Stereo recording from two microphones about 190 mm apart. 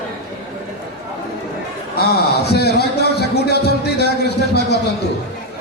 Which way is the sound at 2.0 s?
55° left (ahead or behind).